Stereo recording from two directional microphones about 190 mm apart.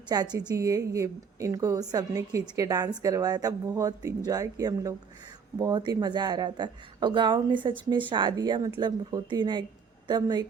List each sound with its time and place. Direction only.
0.1 s a woman's voice: 20° right (ahead or behind)